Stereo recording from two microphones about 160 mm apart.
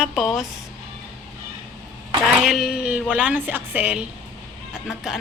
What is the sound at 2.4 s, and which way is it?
Speech, centre (ahead or behind).